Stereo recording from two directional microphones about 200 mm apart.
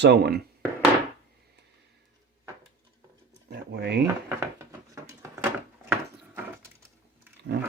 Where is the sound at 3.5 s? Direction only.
55° right (ahead or behind).